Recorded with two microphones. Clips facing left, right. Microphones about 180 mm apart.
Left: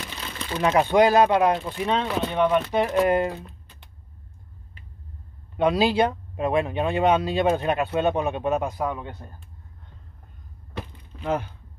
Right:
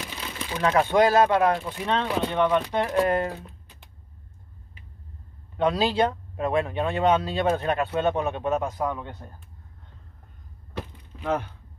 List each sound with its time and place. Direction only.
0.0 s crumpling: 5° right (ahead or behind)
0.6 s speech: 15° left (ahead or behind)
5.6 s speech: 15° left (ahead or behind)
11.1 s a sound: 5° right (ahead or behind)